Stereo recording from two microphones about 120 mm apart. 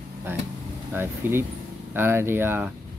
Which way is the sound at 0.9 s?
20° right (ahead or behind).